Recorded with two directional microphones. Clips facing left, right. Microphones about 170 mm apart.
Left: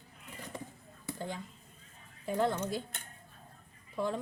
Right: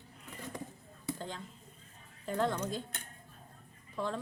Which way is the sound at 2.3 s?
10° left (ahead or behind).